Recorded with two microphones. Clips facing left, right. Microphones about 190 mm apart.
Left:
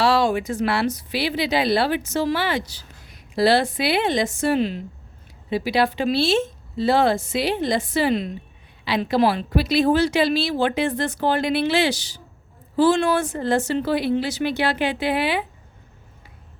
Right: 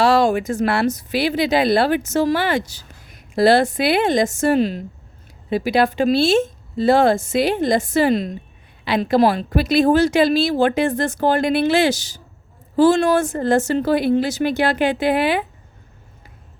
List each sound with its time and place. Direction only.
0.0 s a woman's voice: 45° right (ahead or behind)